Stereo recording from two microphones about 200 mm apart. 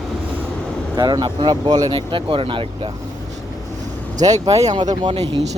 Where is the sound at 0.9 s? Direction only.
20° right (ahead or behind).